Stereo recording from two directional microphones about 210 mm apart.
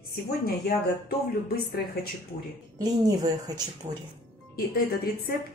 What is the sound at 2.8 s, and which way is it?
Speech, 20° right (ahead or behind).